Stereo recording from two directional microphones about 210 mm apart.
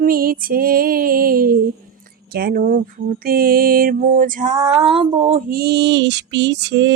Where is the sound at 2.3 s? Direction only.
45° right (ahead or behind).